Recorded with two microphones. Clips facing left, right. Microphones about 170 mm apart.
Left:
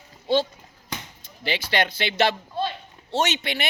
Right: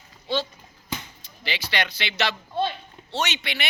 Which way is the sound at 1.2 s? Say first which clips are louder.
Left 4 dB; 50° left (ahead or behind).